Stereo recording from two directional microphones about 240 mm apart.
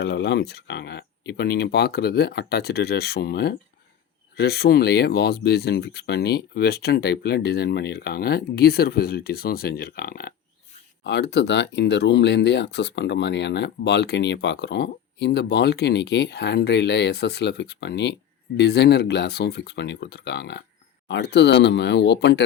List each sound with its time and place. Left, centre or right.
0.0 s speech: left